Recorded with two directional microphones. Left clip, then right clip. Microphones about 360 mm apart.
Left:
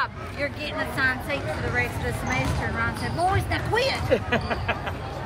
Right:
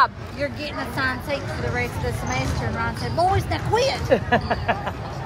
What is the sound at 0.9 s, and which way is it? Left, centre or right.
Speech, right.